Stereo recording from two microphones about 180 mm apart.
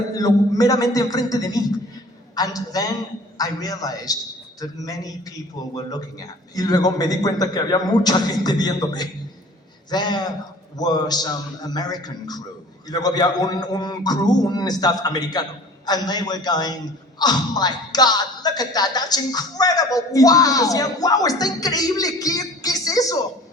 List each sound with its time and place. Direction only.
0.2 s music: 20° left (ahead or behind)